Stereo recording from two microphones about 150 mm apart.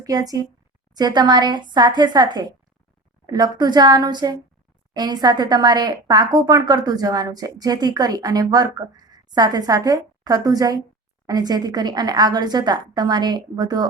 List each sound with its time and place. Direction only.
0.0 s speech: 25° right (ahead or behind)